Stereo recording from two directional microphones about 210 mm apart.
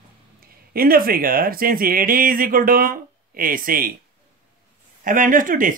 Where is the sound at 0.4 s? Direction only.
45° right (ahead or behind).